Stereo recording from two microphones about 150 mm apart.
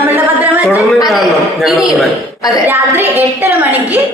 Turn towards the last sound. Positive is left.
turn(degrees=-10)  # may be behind; listen again after turning